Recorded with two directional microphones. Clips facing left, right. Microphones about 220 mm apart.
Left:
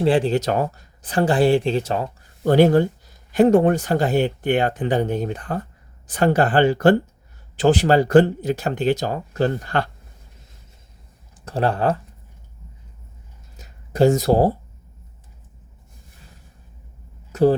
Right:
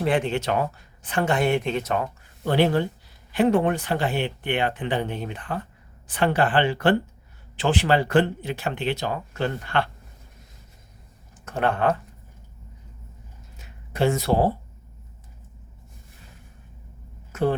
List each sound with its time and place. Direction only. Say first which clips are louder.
0.0 s speech: left 5 dB; 30° left (ahead or behind)
11.4 s speech: left 2 dB; 35° left (ahead or behind)
13.6 s a sound: left 7 dB; 40° left (ahead or behind)